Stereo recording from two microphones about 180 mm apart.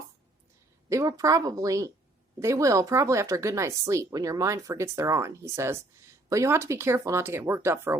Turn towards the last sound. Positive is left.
turn(degrees=-15)  # may be behind; listen again after turning